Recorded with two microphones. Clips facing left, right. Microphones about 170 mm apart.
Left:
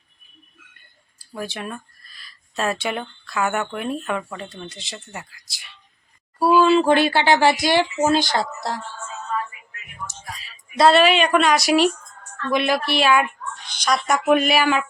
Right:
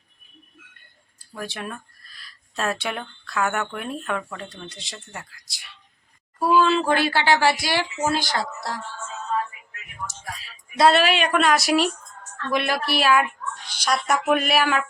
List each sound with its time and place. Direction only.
1.2 s speech: 5° left (ahead or behind)
6.7 s speech: 20° left (ahead or behind)
10.8 s speech: centre (ahead or behind)
13.7 s a sound: 10° right (ahead or behind)
14.3 s speech: centre (ahead or behind)